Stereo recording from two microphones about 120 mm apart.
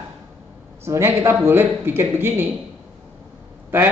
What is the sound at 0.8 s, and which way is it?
Livestock, 20° right (ahead or behind).